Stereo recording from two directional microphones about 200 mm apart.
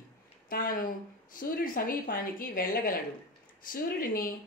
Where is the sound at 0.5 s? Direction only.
45° left (ahead or behind).